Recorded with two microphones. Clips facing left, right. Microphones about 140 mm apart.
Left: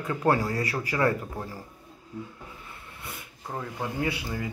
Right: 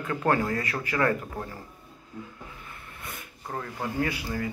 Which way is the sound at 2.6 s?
20° left (ahead or behind).